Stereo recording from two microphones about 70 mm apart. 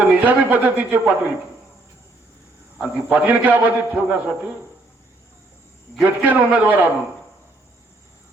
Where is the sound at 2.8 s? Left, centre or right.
Right.